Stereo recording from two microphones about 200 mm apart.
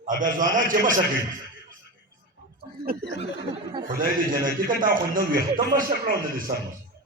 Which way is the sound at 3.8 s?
45° right (ahead or behind).